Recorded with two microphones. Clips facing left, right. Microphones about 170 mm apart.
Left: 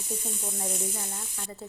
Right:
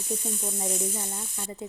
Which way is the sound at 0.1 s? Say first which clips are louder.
Right 3 dB; 10° right (ahead or behind).